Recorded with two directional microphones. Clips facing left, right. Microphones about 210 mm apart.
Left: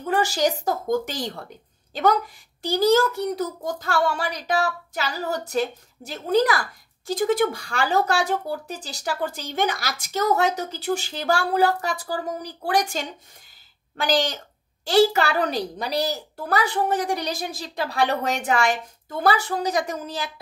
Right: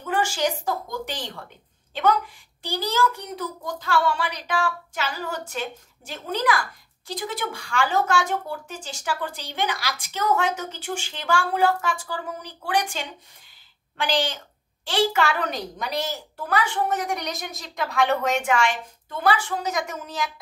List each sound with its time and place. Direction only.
0.0 s speech: 35° left (ahead or behind)